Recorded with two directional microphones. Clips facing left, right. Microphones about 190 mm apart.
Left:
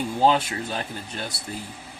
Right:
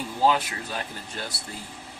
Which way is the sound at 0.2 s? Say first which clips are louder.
Left 2 dB; 25° left (ahead or behind).